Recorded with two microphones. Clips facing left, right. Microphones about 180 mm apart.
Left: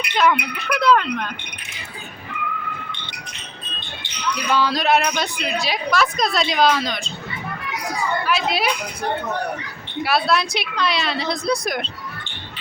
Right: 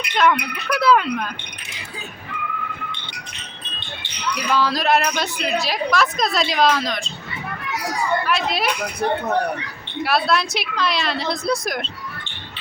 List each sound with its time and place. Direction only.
0.1 s a woman's voice: centre (ahead or behind)
4.4 s a woman's voice: centre (ahead or behind)
8.2 s a woman's voice: centre (ahead or behind)
10.0 s a woman's voice: centre (ahead or behind)